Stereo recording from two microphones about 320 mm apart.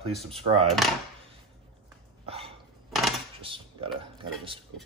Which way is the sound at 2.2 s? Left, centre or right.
Centre.